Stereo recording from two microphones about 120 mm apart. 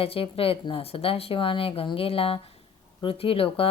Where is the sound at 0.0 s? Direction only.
50° left (ahead or behind).